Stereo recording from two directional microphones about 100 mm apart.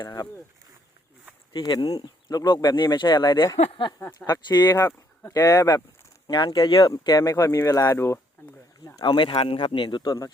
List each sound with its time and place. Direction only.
0.0 s speech: 45° left (ahead or behind)
1.5 s speech: 45° left (ahead or behind)
4.7 s speech: 30° left (ahead or behind)
6.2 s speech: 50° left (ahead or behind); by 8.2 s 30° left (ahead or behind)
9.0 s speech: 50° left (ahead or behind)